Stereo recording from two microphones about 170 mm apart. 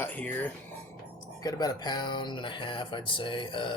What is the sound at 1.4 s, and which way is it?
Speech, 25° left (ahead or behind).